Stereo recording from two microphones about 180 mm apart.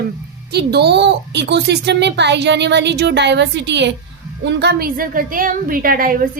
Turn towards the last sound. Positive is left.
turn(degrees=-50)  # may be behind; listen again after turning